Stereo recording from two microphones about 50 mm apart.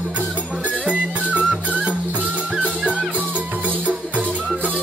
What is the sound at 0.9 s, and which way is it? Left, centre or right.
Music, right.